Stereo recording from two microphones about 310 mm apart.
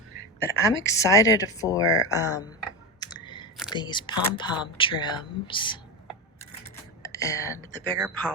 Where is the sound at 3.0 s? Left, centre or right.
Centre.